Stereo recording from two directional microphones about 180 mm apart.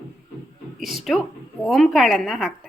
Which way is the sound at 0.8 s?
Centre (ahead or behind).